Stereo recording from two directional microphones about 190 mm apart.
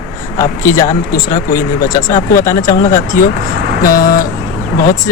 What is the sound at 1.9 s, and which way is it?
Speech, 20° left (ahead or behind).